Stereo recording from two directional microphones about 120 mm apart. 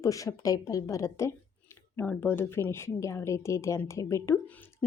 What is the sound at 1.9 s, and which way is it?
A woman's voice, 15° left (ahead or behind).